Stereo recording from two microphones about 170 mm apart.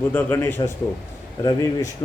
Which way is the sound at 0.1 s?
10° left (ahead or behind).